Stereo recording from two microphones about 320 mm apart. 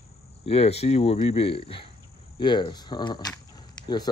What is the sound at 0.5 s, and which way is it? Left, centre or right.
Speech, centre.